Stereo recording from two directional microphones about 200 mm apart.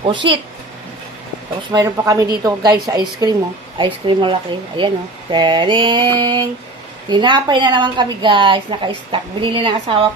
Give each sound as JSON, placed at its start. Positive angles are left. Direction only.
{"t": 1.7, "sound": "a woman's voice", "side_deg": -15}